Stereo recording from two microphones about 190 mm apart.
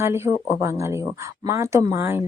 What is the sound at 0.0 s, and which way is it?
Speech, 15° right (ahead or behind).